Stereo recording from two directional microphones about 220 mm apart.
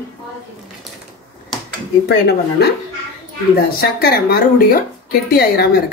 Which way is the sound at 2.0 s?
45° left (ahead or behind).